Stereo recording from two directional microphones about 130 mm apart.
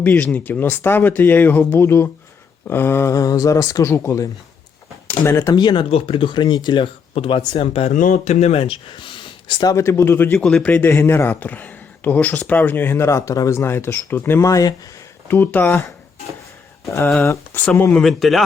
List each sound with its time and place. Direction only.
0.0 s speech: 10° left (ahead or behind)
5.5 s speech: 35° left (ahead or behind)
7.9 s speech: 85° left; by 9.7 s 35° left (ahead or behind)
9.7 s speech: 20° left (ahead or behind)
10.3 s speech: 5° left (ahead or behind); by 14.8 s 25° left (ahead or behind)
15.3 s speech: 15° left (ahead or behind)
17.2 s speech: 20° left (ahead or behind)
18.0 s a man's voice: centre (ahead or behind)